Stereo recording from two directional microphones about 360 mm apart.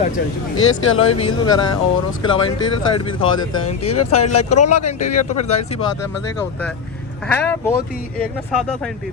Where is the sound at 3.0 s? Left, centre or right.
Centre.